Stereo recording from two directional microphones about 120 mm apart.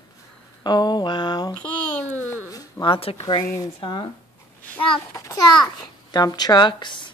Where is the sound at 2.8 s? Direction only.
40° left (ahead or behind).